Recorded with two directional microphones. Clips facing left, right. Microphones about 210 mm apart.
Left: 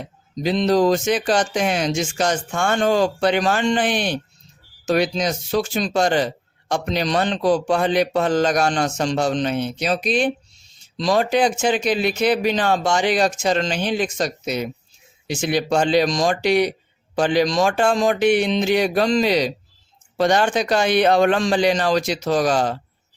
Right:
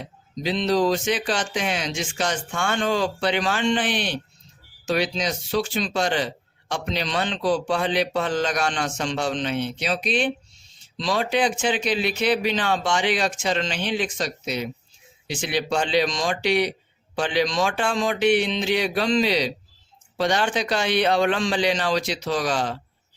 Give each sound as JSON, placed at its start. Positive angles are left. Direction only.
{"t": 0.4, "sound": "speech", "side_deg": 45}